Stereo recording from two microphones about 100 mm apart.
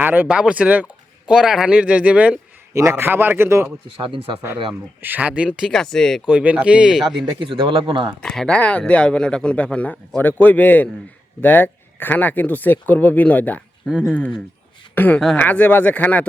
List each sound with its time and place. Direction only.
0.0 s speech: 20° right (ahead or behind)
2.7 s a man's voice: 25° right (ahead or behind)
4.0 s speech: 60° right (ahead or behind)
5.0 s speech: 15° right (ahead or behind)
5.7 s speech: 5° left (ahead or behind)
6.2 s speech: 10° right (ahead or behind)
7.3 s speech: 60° right (ahead or behind)
8.2 s speech: 5° left (ahead or behind)
14.9 s a woman's voice: 20° left (ahead or behind)